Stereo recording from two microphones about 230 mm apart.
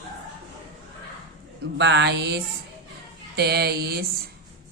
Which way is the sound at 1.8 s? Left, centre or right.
Right.